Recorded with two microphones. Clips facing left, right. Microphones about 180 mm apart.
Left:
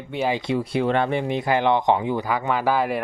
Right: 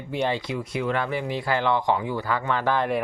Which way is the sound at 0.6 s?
30° left (ahead or behind).